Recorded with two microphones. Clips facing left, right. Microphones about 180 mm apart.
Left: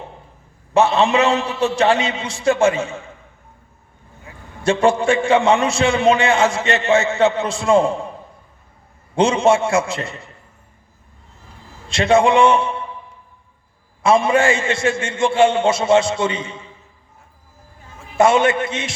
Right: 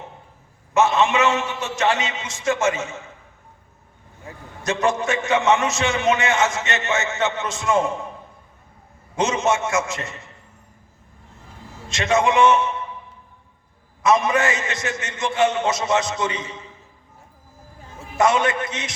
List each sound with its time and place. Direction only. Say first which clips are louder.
0.7 s a man's voice: left 3 dB; 35° left (ahead or behind)
4.6 s a man's voice: left 6 dB; 30° left (ahead or behind)
9.1 s a man's voice: left 6 dB; 30° left (ahead or behind)
11.9 s a man's voice: left 5 dB; 30° left (ahead or behind)
14.0 s a man's voice: left 4 dB; 30° left (ahead or behind)
18.2 s a man's voice: left 5 dB; 25° left (ahead or behind)